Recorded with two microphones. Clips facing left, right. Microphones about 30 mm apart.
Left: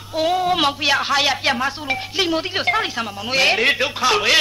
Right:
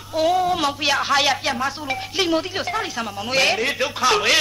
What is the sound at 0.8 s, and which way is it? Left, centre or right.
A woman's voice, centre.